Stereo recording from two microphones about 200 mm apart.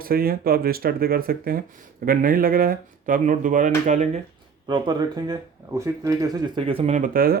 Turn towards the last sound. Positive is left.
turn(degrees=-45)  # may be behind; listen again after turning